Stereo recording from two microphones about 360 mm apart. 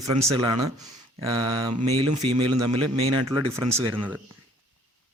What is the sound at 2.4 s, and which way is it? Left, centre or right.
Speech, right.